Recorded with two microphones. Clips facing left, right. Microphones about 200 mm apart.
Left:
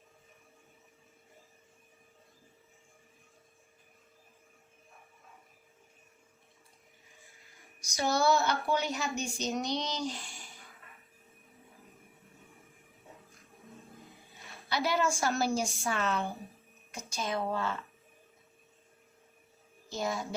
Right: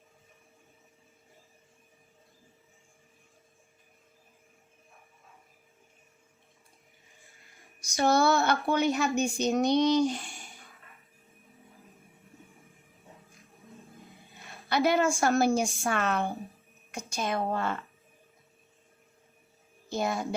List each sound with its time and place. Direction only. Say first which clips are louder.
7.9 s speech: right 4 dB; 60° right (ahead or behind)
14.7 s a woman's voice: right 5 dB; 55° right (ahead or behind)
19.9 s speech: right 4 dB; 55° right (ahead or behind)